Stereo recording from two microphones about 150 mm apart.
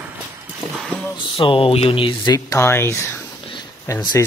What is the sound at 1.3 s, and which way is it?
Speech, 40° left (ahead or behind).